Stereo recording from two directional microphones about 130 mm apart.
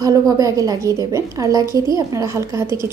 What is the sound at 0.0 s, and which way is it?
A woman's voice, 25° right (ahead or behind).